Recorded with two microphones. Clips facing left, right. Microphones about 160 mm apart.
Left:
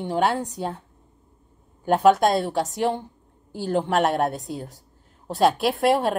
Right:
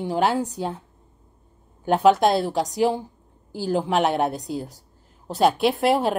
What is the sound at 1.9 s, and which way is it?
A woman's voice, centre (ahead or behind).